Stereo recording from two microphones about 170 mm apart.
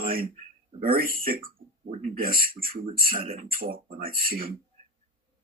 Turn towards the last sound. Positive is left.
turn(degrees=-60)  # may be behind; listen again after turning